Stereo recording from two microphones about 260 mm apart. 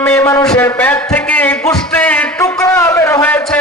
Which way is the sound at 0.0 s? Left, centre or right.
Centre.